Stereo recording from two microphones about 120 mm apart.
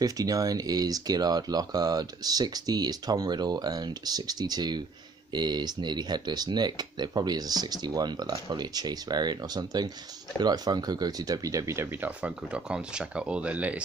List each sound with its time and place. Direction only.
0.0 s speech: 30° right (ahead or behind)
12.2 s speech: 10° right (ahead or behind)